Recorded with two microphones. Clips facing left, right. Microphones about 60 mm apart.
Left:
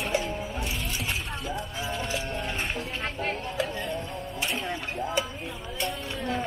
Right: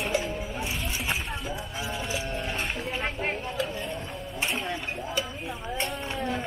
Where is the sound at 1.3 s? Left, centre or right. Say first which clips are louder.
Left 1 dB; centre.